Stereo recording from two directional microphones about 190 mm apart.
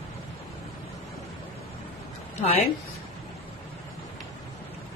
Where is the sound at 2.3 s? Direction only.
35° left (ahead or behind).